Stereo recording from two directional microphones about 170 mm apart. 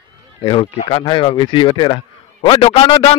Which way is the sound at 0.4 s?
25° left (ahead or behind).